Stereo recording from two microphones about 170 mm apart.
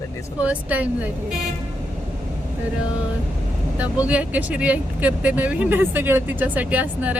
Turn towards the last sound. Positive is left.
turn(degrees=-10)  # may be behind; listen again after turning